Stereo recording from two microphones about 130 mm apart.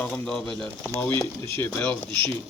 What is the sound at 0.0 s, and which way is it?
Speech, 5° left (ahead or behind).